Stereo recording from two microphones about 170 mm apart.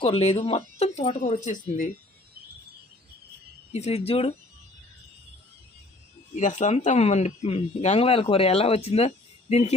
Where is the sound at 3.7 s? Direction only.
40° left (ahead or behind).